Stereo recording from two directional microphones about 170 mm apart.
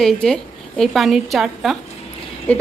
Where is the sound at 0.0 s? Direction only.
Centre (ahead or behind).